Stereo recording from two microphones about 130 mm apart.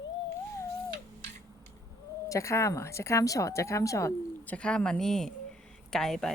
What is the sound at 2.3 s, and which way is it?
Speech, 20° left (ahead or behind).